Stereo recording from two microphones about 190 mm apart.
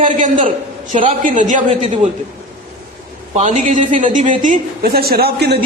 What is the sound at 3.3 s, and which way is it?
A woman's voice, 35° right (ahead or behind).